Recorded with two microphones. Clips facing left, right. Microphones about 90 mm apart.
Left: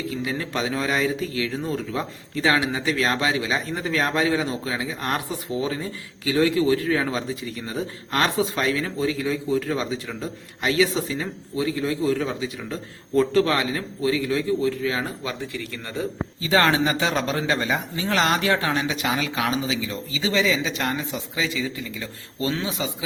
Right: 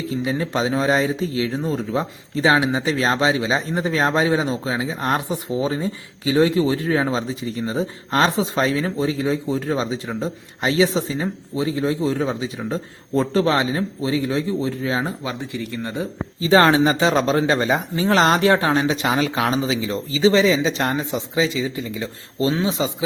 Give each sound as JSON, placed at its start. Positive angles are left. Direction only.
{"t": 0.1, "sound": "speech", "side_deg": -25}